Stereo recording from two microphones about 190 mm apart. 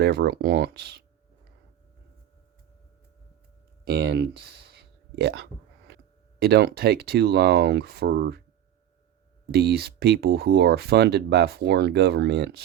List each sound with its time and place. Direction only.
0.0 s speech: 60° right (ahead or behind)
3.8 s speech: 60° right (ahead or behind)
5.9 s a sound: 60° right (ahead or behind)
6.4 s speech: 60° right (ahead or behind)
9.5 s speech: 60° right (ahead or behind)